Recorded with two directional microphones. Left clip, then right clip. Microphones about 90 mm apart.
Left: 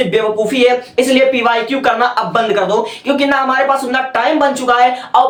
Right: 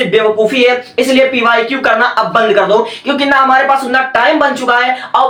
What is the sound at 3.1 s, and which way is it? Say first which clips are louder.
Speech: right 5 dB; 25° left (ahead or behind).